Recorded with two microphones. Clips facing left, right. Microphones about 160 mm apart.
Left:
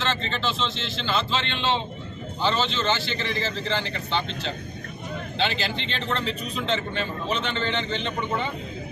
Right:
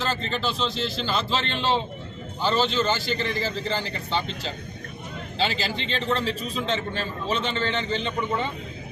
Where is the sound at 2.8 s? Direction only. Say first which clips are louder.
Right 2 dB; 40° right (ahead or behind).